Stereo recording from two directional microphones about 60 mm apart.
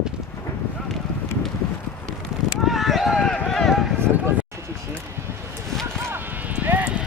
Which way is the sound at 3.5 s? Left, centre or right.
Centre.